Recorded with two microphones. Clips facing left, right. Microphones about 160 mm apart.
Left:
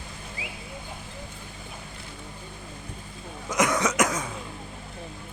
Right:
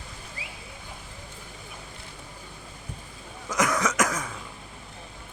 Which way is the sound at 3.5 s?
20° left (ahead or behind).